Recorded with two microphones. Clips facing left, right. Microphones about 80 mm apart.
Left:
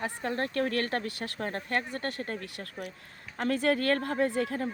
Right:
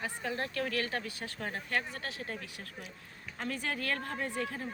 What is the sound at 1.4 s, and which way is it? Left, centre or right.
Speech, left.